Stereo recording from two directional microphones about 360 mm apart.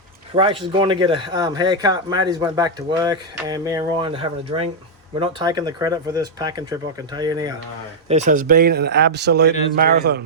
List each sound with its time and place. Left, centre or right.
0.3 s speech: centre